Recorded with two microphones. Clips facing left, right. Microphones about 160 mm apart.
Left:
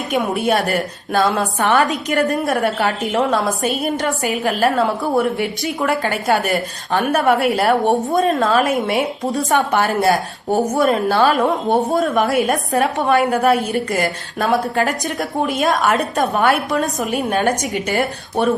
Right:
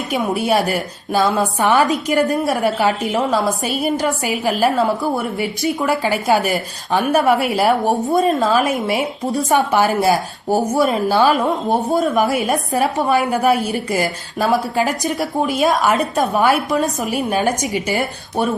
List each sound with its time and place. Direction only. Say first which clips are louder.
0.1 s a woman's voice: even; centre (ahead or behind)